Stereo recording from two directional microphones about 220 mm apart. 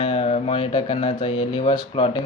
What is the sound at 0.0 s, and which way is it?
Speech, 25° left (ahead or behind).